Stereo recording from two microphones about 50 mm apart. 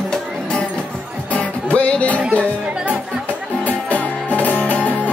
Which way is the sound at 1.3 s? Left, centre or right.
Left.